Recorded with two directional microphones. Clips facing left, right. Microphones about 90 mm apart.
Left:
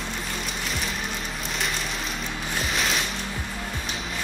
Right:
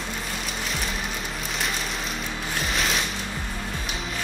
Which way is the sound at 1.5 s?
Centre (ahead or behind).